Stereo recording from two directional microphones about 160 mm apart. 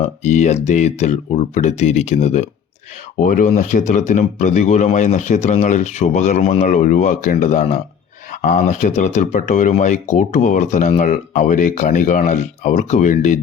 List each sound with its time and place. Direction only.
0.0 s speech: 45° left (ahead or behind)
3.2 s speech: 55° left (ahead or behind)